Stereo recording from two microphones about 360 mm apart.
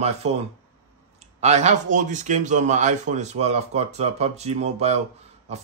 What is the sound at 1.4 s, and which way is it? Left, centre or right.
A man's voice, centre.